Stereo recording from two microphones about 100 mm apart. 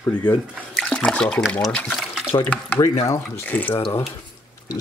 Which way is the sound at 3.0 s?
30° left (ahead or behind).